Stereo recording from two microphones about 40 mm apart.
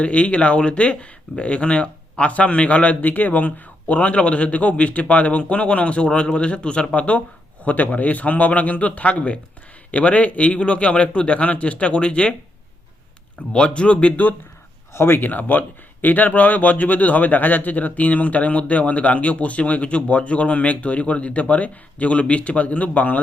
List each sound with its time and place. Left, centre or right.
0.0 s a man's voice: left
3.0 s a man's voice: left
13.5 s speech: left
14.9 s speech: left
15.2 s a man's voice: left